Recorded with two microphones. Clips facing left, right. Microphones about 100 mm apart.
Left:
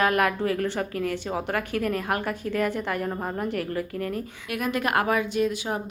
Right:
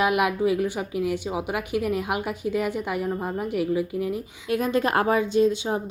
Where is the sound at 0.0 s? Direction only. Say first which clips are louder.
Right 1 dB; 15° right (ahead or behind).